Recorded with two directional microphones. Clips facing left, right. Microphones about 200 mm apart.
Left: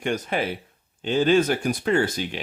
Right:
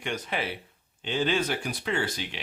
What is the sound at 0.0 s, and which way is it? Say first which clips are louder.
Speech: left 6 dB; 45° left (ahead or behind).